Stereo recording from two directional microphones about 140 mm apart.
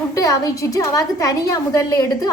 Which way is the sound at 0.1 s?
25° left (ahead or behind).